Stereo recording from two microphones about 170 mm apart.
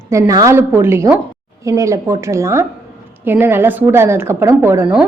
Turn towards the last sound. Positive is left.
turn(degrees=-10)  # may be behind; listen again after turning